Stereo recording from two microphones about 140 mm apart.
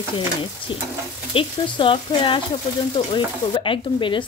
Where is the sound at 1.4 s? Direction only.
40° left (ahead or behind).